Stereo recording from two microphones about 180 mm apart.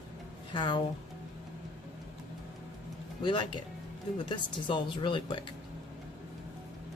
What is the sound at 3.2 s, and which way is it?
A woman's voice, 25° left (ahead or behind).